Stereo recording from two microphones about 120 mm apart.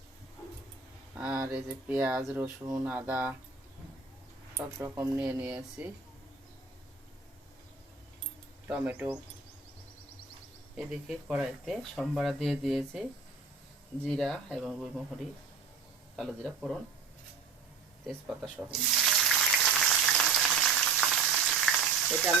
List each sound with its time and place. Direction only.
1.1 s a sound: 15° right (ahead or behind)
1.5 s speech: 15° right (ahead or behind)
4.5 s speech: 25° right (ahead or behind)
8.6 s speech: 15° right (ahead or behind)
10.8 s speech: 5° right (ahead or behind)
16.1 s speech: centre (ahead or behind)
18.7 s frying: centre (ahead or behind)